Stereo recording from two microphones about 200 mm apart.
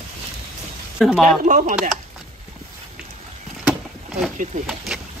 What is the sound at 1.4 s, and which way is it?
Speech, 40° right (ahead or behind).